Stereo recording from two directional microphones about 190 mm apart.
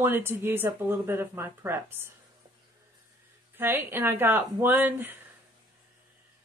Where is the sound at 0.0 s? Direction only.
10° right (ahead or behind).